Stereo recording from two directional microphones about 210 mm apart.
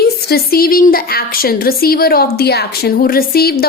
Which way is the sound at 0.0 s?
45° left (ahead or behind).